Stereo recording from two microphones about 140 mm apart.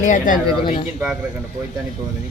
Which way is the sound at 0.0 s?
65° left (ahead or behind).